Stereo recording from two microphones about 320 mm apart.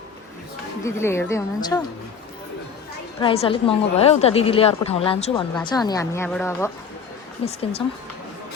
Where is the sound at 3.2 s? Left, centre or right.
Centre.